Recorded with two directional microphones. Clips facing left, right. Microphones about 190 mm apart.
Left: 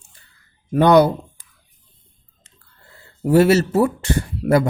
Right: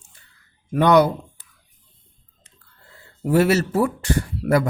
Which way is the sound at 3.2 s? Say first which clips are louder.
Left 4 dB; 30° left (ahead or behind).